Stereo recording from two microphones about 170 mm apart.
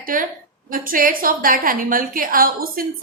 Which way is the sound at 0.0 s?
55° right (ahead or behind).